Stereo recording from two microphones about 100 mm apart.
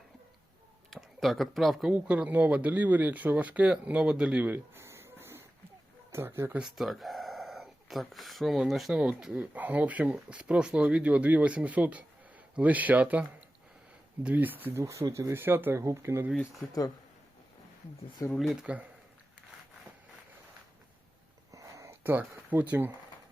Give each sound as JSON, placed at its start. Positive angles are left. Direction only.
{"t": 0.9, "sound": "speech", "side_deg": 0}
{"t": 1.9, "sound": "speech", "side_deg": -15}
{"t": 6.6, "sound": "speech", "side_deg": -5}
{"t": 14.3, "sound": "speech", "side_deg": -15}
{"t": 14.8, "sound": "speech", "side_deg": -30}
{"t": 18.3, "sound": "speech", "side_deg": -5}
{"t": 21.5, "sound": "a sound", "side_deg": -35}
{"t": 22.0, "sound": "speech", "side_deg": -20}